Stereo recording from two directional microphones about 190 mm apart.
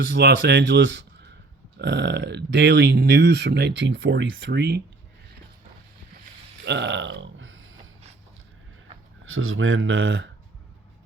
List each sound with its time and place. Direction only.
0.1 s speech: 60° right (ahead or behind)
6.7 s burping: 65° right (ahead or behind); by 7.8 s 90° right
9.2 s speech: 90° right